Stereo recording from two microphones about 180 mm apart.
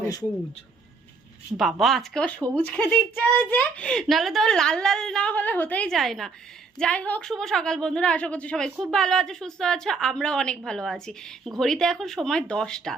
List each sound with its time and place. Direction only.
0.0 s speech: 20° left (ahead or behind)
1.5 s a woman's voice: centre (ahead or behind)